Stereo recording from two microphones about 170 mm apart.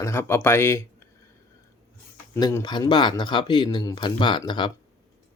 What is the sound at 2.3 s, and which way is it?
Speech, 15° left (ahead or behind).